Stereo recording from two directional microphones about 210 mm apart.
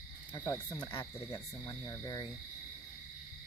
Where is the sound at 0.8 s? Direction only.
20° left (ahead or behind).